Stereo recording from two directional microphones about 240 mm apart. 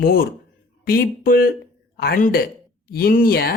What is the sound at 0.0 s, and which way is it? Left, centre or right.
Speech, left.